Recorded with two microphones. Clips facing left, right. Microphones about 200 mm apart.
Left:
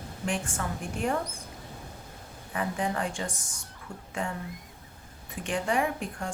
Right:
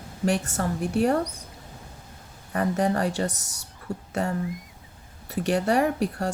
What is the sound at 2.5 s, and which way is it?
A woman's voice, 40° right (ahead or behind).